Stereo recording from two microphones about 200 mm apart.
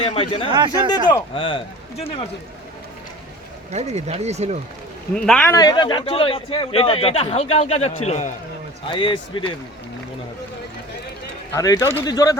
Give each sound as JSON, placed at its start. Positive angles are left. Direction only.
{"t": 0.1, "sound": "speech", "side_deg": 25}
{"t": 0.4, "sound": "speech", "side_deg": -20}
{"t": 1.0, "sound": "speech", "side_deg": 25}
{"t": 3.7, "sound": "speech", "side_deg": -35}
{"t": 5.1, "sound": "speech", "side_deg": 5}
{"t": 5.5, "sound": "speech", "side_deg": 20}
{"t": 11.5, "sound": "speech", "side_deg": 15}